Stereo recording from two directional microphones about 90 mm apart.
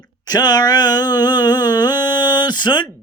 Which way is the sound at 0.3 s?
45° left (ahead or behind).